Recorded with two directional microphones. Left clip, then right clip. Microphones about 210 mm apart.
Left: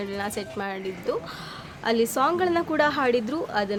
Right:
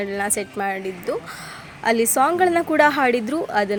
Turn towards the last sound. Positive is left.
turn(degrees=-15)  # may be behind; listen again after turning